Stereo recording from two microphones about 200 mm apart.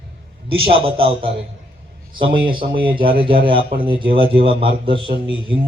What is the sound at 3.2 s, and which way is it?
Speech, 25° right (ahead or behind).